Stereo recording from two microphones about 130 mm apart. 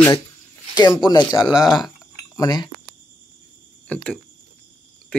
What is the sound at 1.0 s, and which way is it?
Speech, 30° left (ahead or behind).